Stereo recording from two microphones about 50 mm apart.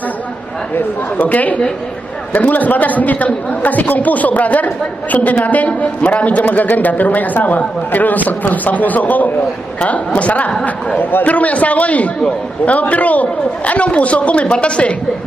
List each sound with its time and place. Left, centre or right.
0.7 s a man's voice: left
11.0 s a man's voice: left
11.2 s a woman's voice: left